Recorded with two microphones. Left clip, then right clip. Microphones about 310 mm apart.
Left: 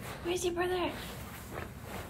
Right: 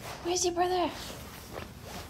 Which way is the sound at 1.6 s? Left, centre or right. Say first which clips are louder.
Even; centre.